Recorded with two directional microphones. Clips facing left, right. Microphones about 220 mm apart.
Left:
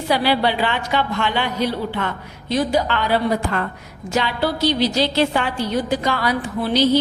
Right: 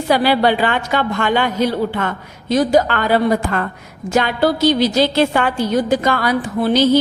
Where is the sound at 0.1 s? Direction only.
45° right (ahead or behind).